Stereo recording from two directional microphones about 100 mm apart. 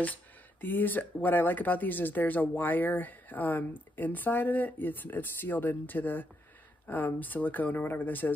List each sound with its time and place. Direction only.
0.0 s speech: 20° left (ahead or behind)